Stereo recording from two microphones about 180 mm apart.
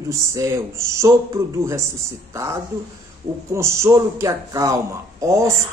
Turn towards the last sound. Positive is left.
turn(degrees=-15)  # may be behind; listen again after turning